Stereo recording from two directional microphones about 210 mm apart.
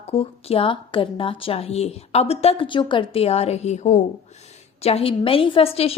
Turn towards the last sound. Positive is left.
turn(degrees=30)  # may be behind; listen again after turning